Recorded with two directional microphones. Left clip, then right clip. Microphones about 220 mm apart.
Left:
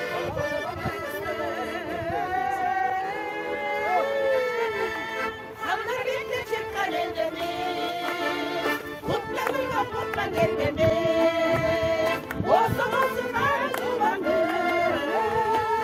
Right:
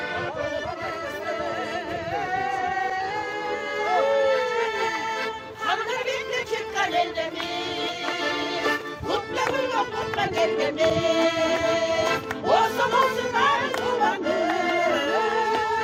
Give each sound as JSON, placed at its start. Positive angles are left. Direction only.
{"t": 3.8, "sound": "music", "side_deg": -35}
{"t": 5.6, "sound": "a sound", "side_deg": -35}
{"t": 8.2, "sound": "music", "side_deg": -30}
{"t": 10.3, "sound": "music", "side_deg": -45}